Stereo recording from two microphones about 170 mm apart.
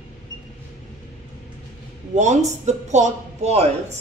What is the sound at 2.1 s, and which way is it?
Speech, 45° right (ahead or behind).